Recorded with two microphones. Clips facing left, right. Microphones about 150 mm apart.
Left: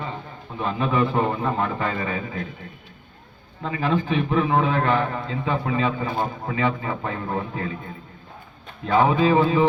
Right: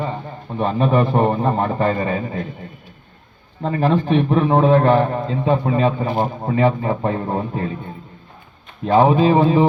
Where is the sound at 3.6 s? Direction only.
35° right (ahead or behind).